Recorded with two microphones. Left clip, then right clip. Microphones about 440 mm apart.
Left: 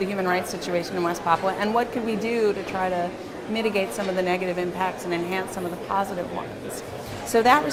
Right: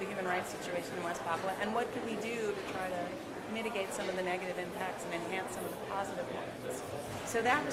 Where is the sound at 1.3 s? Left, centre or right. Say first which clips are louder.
Left 16 dB; left.